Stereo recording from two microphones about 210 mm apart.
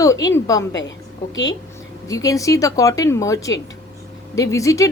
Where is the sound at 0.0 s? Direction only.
15° left (ahead or behind).